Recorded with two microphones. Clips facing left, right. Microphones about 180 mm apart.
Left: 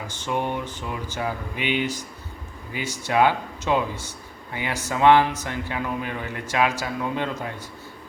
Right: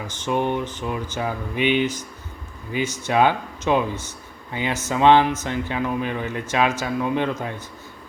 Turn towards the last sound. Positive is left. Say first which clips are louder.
# right 4 dB
turn(degrees=-20)  # may be behind; listen again after turning